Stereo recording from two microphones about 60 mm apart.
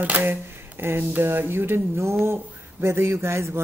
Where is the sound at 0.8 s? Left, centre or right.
Right.